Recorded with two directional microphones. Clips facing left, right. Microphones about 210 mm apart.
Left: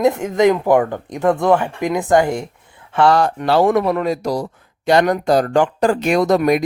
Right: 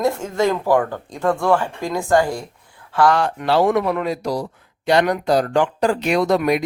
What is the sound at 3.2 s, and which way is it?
Speech, 40° left (ahead or behind).